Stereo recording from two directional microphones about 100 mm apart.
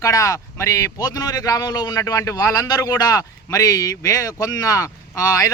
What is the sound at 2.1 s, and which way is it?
A man's voice, 35° left (ahead or behind).